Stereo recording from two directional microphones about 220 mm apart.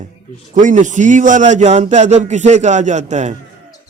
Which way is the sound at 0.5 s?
35° right (ahead or behind).